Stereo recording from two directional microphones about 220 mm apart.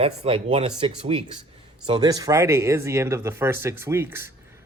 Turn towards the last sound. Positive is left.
turn(degrees=-10)  # may be behind; listen again after turning